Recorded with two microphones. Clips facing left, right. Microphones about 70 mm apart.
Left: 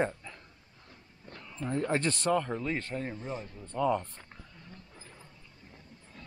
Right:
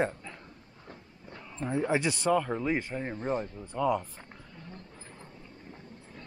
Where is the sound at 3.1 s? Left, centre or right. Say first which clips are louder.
Right 7 dB; right.